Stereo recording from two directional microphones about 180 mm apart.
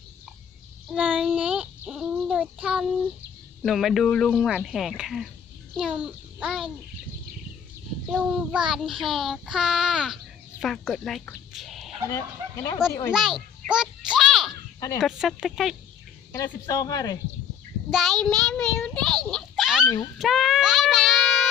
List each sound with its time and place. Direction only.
0.9 s a child's voice: 10° right (ahead or behind)
1.3 s child singing: 5° right (ahead or behind)
5.7 s a child's voice: 5° right (ahead or behind)
8.1 s child singing: 5° right (ahead or behind)
10.6 s speech: centre (ahead or behind)
12.0 s speech: 20° left (ahead or behind)
13.1 s children playing: centre (ahead or behind)
14.8 s speech: 20° left (ahead or behind)
15.0 s child singing: centre (ahead or behind)
16.3 s speech: 20° left (ahead or behind)
17.9 s child singing: centre (ahead or behind)
18.8 s a sound: 5° left (ahead or behind)
20.1 s child singing: centre (ahead or behind)